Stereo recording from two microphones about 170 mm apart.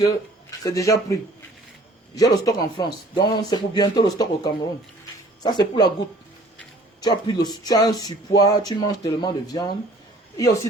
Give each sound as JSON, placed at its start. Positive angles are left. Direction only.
{"t": 0.6, "sound": "speech", "side_deg": 20}
{"t": 7.0, "sound": "speech", "side_deg": 25}